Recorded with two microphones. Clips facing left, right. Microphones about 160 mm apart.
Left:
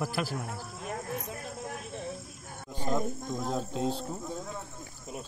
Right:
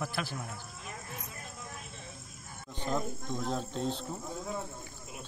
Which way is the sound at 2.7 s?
10° left (ahead or behind).